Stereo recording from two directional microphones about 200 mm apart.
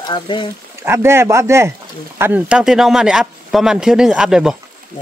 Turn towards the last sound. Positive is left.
turn(degrees=-5)  # may be behind; listen again after turning